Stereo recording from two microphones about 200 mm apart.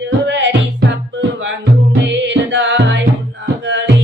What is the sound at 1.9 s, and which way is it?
Music, 60° right (ahead or behind).